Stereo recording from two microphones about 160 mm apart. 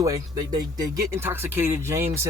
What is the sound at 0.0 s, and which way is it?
Speech, 20° right (ahead or behind).